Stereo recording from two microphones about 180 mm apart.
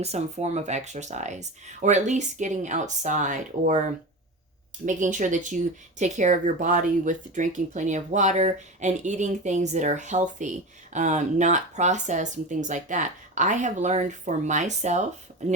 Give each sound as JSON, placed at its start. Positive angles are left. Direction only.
{"t": 0.0, "sound": "speech", "side_deg": -35}